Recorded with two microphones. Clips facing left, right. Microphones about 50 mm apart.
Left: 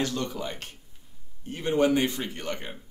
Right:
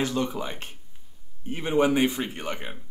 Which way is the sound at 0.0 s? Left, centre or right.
Centre.